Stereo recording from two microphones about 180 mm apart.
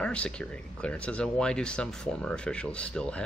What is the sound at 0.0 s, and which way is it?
Speech, 5° left (ahead or behind).